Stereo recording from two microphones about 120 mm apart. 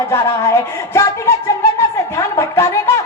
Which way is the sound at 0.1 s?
20° left (ahead or behind).